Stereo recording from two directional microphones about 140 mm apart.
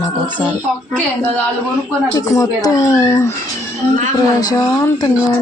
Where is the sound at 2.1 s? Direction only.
25° left (ahead or behind).